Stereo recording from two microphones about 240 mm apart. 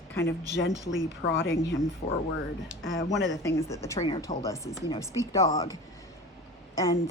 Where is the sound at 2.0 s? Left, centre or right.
Left.